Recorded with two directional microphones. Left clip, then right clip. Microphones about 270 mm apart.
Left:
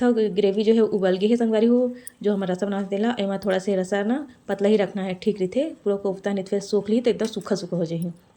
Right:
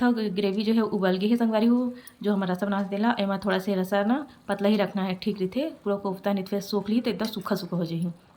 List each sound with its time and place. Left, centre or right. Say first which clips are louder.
0.0 s speech: left 6 dB; centre